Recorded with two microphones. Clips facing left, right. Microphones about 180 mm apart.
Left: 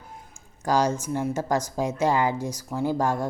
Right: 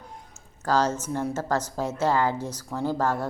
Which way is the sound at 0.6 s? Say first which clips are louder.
Left 1 dB; 15° left (ahead or behind).